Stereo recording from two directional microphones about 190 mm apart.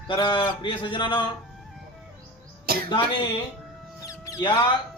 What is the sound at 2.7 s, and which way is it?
Cough, 50° right (ahead or behind).